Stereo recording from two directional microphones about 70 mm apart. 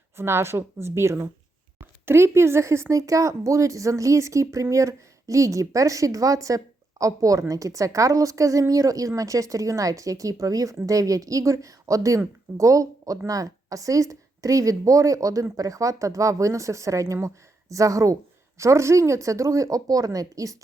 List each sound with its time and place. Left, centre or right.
0.2 s a woman's voice: right